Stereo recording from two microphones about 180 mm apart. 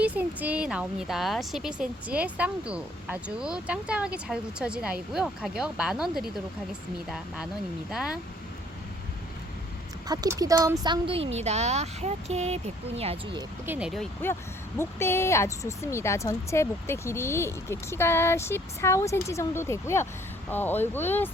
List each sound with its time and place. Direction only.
0.0 s speech: 10° right (ahead or behind)
7.9 s speech: 5° right (ahead or behind)
10.1 s a woman's voice: 20° right (ahead or behind)
13.7 s speech: 5° right (ahead or behind)
14.8 s a woman's voice: 15° left (ahead or behind)